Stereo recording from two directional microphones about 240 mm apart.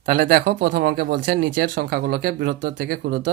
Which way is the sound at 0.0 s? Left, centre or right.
Right.